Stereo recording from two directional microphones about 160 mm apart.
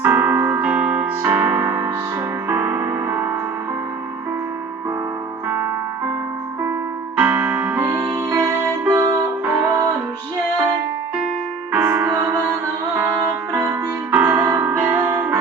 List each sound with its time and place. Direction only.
0.0 s music: 10° right (ahead or behind)
7.2 s music: 10° right (ahead or behind)
7.9 s music: 20° right (ahead or behind)
11.7 s music: 10° right (ahead or behind)